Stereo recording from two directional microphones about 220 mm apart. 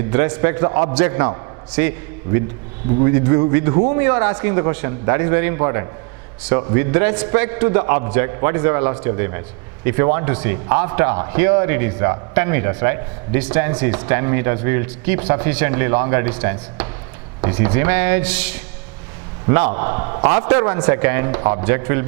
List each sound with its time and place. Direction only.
0.1 s a man's voice: 10° right (ahead or behind)
20.3 s a man's voice: 15° right (ahead or behind)